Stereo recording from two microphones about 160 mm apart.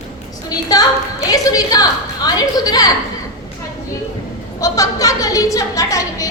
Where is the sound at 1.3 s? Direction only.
20° left (ahead or behind).